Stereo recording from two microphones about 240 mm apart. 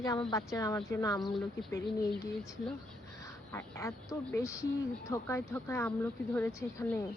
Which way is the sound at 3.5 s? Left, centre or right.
Centre.